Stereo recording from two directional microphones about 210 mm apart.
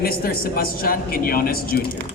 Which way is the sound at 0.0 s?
45° left (ahead or behind).